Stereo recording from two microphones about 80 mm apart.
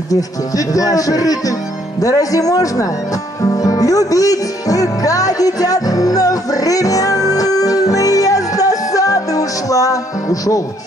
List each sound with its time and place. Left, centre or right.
0.1 s speech: left
3.4 s music: left